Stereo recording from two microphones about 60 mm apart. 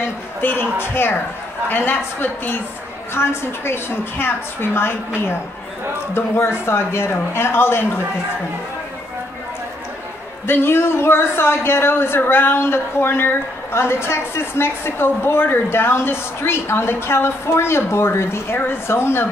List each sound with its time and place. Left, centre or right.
0.4 s a woman's voice: left
6.1 s speech: left
10.4 s speech: left